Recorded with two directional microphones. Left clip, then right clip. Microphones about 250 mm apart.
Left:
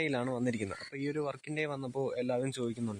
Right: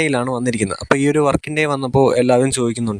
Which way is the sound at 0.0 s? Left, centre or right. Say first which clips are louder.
Right 15 dB; right.